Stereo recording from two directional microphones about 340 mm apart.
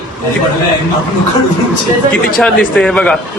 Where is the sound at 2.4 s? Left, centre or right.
Centre.